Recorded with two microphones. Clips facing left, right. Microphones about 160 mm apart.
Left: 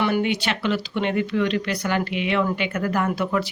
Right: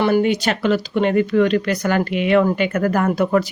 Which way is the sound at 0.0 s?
40° right (ahead or behind).